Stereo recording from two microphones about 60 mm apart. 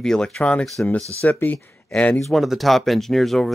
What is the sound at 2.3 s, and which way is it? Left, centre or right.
Speech, centre.